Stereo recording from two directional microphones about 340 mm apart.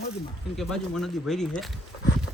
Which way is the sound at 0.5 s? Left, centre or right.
Centre.